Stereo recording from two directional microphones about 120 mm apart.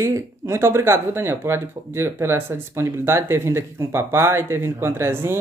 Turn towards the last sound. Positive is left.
turn(degrees=-20)  # may be behind; listen again after turning